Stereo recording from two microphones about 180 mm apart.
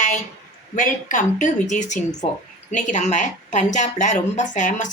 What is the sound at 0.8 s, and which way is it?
Speech, 45° left (ahead or behind).